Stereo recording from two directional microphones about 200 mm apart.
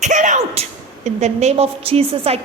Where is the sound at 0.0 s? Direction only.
40° right (ahead or behind).